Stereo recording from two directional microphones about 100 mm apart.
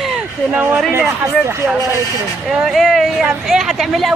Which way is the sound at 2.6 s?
5° right (ahead or behind).